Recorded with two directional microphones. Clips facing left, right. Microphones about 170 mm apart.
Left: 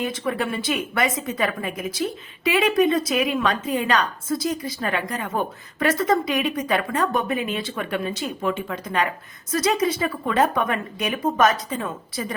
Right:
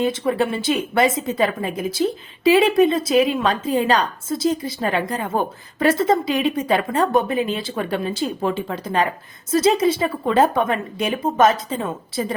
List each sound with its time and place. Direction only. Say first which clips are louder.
0.0 s a woman's voice: right 5 dB; 25° right (ahead or behind)